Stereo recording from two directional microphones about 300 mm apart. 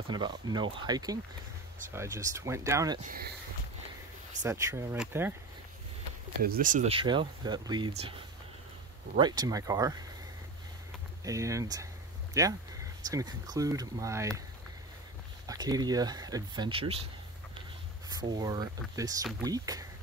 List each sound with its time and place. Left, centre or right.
0.1 s speech: centre
3.0 s speech: right
4.4 s speech: centre
6.4 s speech: right
9.1 s speech: centre
11.2 s speech: centre
15.4 s speech: centre
18.1 s speech: centre